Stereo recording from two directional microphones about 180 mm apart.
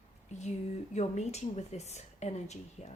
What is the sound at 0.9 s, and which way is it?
Speech, 40° left (ahead or behind).